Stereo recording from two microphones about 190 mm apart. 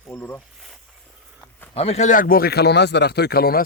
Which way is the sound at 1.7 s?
35° left (ahead or behind).